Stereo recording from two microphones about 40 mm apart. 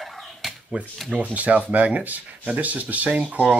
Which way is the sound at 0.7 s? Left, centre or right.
Right.